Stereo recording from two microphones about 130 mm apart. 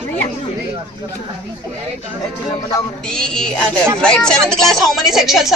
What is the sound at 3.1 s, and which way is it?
Speech, 5° left (ahead or behind).